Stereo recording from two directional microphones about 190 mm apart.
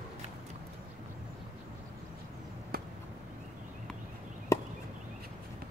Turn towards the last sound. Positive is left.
turn(degrees=15)  # may be behind; listen again after turning